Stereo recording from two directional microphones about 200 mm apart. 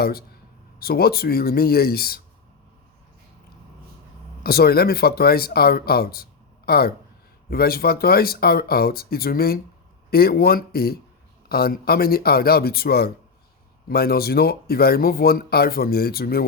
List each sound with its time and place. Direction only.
0.0 s speech: 50° left (ahead or behind)
4.4 s speech: 50° left (ahead or behind)